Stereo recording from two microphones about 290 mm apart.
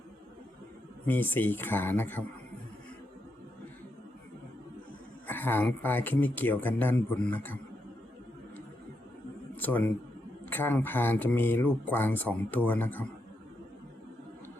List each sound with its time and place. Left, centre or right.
1.0 s speech: centre
5.2 s speech: centre
9.6 s a man's voice: centre